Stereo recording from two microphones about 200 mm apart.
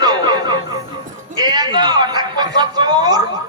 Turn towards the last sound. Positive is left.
turn(degrees=-20)  # may be behind; listen again after turning